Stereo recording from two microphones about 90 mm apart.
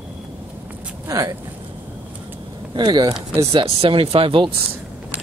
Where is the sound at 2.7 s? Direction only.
55° right (ahead or behind).